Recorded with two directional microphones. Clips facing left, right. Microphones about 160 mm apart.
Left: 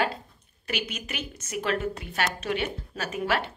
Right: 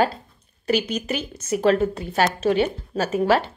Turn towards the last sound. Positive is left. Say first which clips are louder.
# right 9 dB
turn(degrees=-30)  # may be behind; listen again after turning